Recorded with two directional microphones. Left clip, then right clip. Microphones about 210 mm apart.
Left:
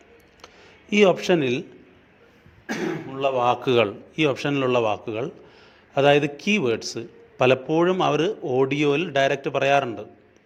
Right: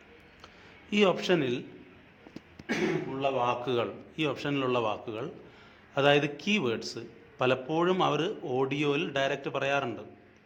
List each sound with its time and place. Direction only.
0.4 s a sound: 20° left (ahead or behind)
3.2 s speech: 45° left (ahead or behind)
3.7 s a man's voice: 30° left (ahead or behind)